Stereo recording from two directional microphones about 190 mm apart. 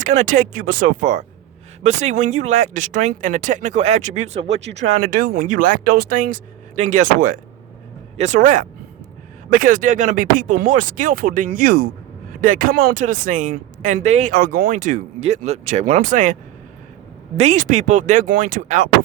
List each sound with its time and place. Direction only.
0.3 s speech: 45° right (ahead or behind)